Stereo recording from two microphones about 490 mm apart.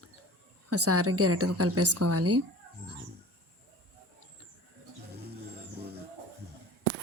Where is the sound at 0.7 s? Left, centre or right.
Right.